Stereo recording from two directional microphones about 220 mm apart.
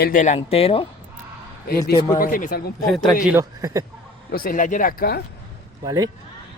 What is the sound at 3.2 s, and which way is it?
Speech, 10° right (ahead or behind).